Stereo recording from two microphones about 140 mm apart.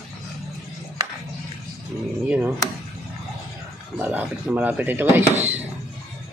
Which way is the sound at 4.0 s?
10° right (ahead or behind).